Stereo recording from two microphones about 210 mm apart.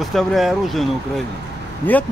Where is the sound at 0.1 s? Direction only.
Centre (ahead or behind).